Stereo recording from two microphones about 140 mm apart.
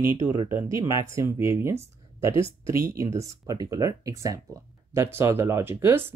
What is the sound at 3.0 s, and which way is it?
Speech, 20° right (ahead or behind).